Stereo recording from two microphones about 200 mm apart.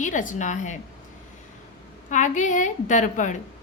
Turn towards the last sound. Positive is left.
turn(degrees=40)  # may be behind; listen again after turning